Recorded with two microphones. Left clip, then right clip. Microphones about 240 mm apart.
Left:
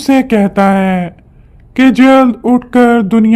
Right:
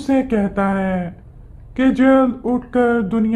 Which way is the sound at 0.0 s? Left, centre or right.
Left.